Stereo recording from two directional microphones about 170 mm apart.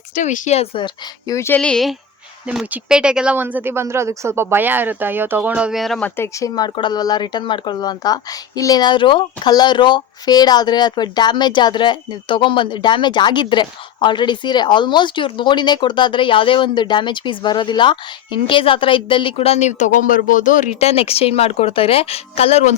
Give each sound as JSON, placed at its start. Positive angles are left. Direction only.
{"t": 0.2, "sound": "speech", "side_deg": 45}
{"t": 1.3, "sound": "speech", "side_deg": 15}
{"t": 6.1, "sound": "speech", "side_deg": 15}